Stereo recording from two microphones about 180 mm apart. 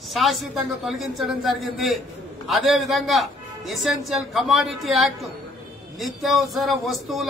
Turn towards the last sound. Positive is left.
turn(degrees=0)  # may be behind; listen again after turning